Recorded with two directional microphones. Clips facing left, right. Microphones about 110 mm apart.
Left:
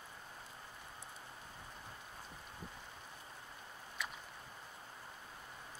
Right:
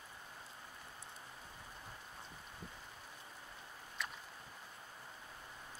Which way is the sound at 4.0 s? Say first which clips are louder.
Even; centre (ahead or behind).